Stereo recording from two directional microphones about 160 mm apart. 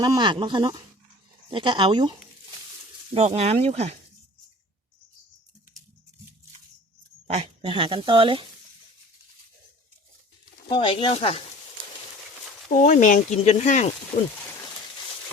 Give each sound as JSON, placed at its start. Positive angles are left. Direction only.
{"t": 0.0, "sound": "speech", "side_deg": -30}
{"t": 3.2, "sound": "speech", "side_deg": -40}
{"t": 7.3, "sound": "speech", "side_deg": -35}
{"t": 10.7, "sound": "speech", "side_deg": 35}
{"t": 12.6, "sound": "speech", "side_deg": 50}